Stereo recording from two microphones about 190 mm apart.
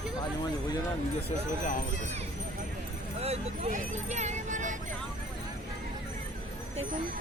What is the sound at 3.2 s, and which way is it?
Speech, 35° right (ahead or behind).